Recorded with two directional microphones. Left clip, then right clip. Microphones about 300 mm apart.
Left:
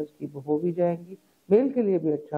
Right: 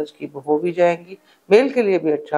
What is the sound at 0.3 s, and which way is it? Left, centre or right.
Speech, right.